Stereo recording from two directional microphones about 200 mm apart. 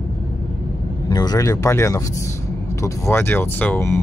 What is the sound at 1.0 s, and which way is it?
Speech, 20° left (ahead or behind).